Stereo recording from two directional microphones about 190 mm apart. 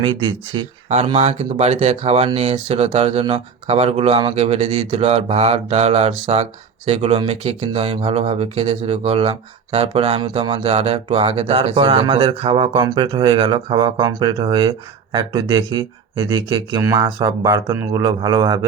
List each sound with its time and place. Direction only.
0.0 s speech: 25° right (ahead or behind)